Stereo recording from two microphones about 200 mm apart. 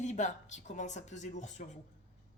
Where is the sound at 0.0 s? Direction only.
35° left (ahead or behind).